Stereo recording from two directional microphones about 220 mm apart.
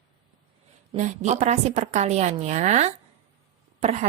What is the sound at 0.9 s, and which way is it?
A woman's voice, 35° right (ahead or behind).